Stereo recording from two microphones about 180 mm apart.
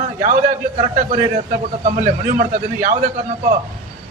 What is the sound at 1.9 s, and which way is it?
A man's voice, 45° right (ahead or behind).